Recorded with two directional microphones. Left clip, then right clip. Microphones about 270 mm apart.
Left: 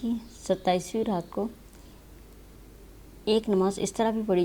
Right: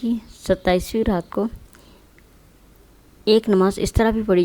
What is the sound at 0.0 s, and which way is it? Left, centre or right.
Speech, right.